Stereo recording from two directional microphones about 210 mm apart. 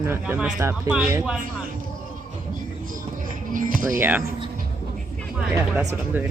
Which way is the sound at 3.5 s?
40° right (ahead or behind).